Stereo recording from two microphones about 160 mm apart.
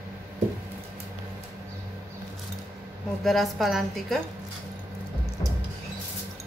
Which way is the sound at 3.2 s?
Centre (ahead or behind).